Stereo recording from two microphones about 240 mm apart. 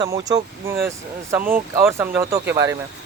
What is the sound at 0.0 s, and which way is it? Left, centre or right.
Speech, centre.